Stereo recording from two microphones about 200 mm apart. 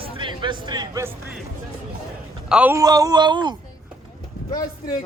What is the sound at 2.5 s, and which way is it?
Speech, 10° right (ahead or behind).